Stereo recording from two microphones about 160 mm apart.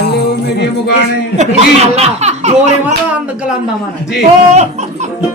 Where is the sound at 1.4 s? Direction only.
45° right (ahead or behind).